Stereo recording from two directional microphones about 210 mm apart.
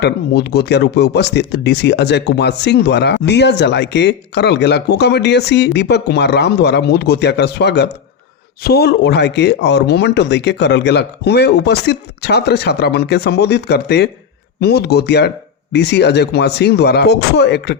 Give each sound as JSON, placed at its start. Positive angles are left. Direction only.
{"t": 0.0, "sound": "speech", "side_deg": 50}